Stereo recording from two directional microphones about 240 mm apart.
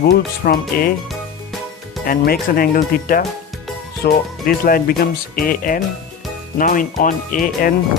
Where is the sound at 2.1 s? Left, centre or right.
Left.